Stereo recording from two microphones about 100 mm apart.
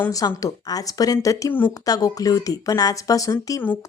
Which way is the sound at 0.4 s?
35° left (ahead or behind).